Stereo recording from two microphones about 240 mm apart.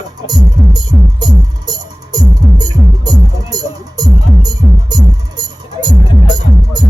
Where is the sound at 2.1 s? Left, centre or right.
Centre.